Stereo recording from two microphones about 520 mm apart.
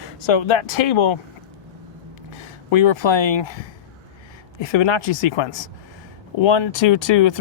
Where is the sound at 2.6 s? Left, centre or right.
Left.